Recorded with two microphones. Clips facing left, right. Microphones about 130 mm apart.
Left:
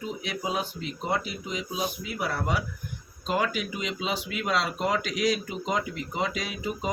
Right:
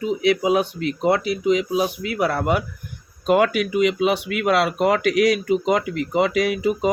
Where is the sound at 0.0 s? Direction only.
75° right (ahead or behind).